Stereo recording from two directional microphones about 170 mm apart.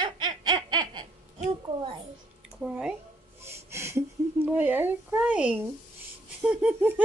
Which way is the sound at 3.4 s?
15° right (ahead or behind).